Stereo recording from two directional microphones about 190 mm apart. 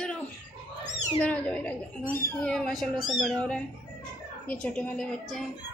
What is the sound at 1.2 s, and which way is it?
A child's voice, 5° left (ahead or behind).